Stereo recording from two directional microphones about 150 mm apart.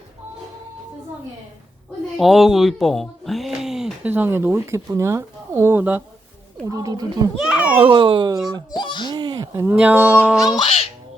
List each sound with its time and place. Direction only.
2.1 s speech: centre (ahead or behind)
6.7 s a child's voice: 25° right (ahead or behind)
7.3 s speech: 5° right (ahead or behind)
7.8 s a child's voice: 35° right (ahead or behind)
8.7 s a sound: 30° left (ahead or behind)
9.1 s a sound: 30° right (ahead or behind)
9.7 s speech: 10° right (ahead or behind)